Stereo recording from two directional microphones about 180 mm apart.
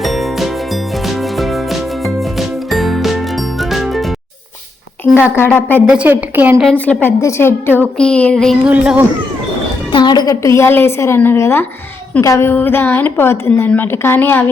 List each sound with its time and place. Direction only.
0.0 s music: centre (ahead or behind)
2.6 s music: centre (ahead or behind)
5.5 s a woman's voice: 10° left (ahead or behind)
5.9 s a woman's voice: 5° right (ahead or behind)
6.7 s a woman's voice: 10° left (ahead or behind)
8.6 s a woman's voice: 5° right (ahead or behind)
9.9 s a woman's voice: 25° left (ahead or behind)